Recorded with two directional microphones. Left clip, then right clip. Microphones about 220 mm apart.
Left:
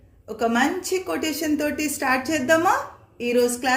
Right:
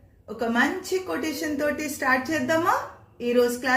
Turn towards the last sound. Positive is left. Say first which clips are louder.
# left 1 dB
turn(degrees=50)  # may be behind; listen again after turning